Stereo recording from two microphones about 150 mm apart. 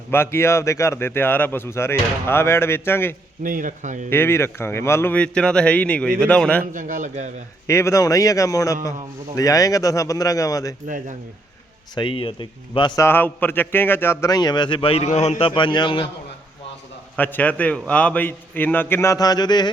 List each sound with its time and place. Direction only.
0.1 s a man's voice: 15° left (ahead or behind)
3.4 s speech: 65° right (ahead or behind)
4.1 s a man's voice: 15° left (ahead or behind)
6.7 s speech: 60° right (ahead or behind)
7.7 s a man's voice: 20° left (ahead or behind)
11.9 s a man's voice: 35° left (ahead or behind)
13.0 s a man's voice: 15° left (ahead or behind); by 16.0 s 35° left (ahead or behind)
17.2 s a man's voice: 10° left (ahead or behind); by 19.7 s 30° left (ahead or behind)